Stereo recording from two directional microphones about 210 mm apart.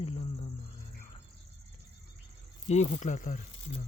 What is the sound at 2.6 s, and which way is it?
Speech, 35° left (ahead or behind).